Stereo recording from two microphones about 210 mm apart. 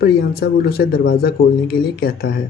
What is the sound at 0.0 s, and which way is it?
Speech, 50° left (ahead or behind).